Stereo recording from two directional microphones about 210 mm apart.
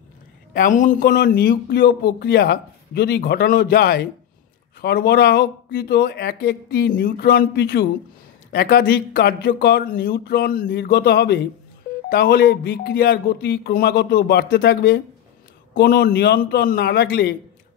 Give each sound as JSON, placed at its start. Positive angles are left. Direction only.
{"t": 0.5, "sound": "a man's voice", "side_deg": 40}